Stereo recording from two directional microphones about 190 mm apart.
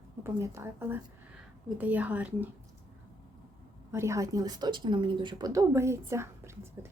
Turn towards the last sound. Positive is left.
turn(degrees=-15)  # may be behind; listen again after turning